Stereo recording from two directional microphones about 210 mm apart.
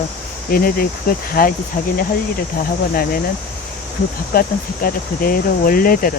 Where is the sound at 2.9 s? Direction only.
45° left (ahead or behind).